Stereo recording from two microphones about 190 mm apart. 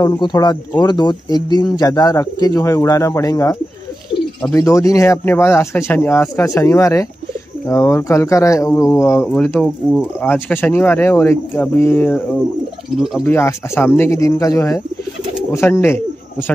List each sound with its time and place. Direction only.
0.0 s speech: 20° left (ahead or behind)
4.6 s speech: 15° left (ahead or behind)
9.3 s speech: 5° left (ahead or behind)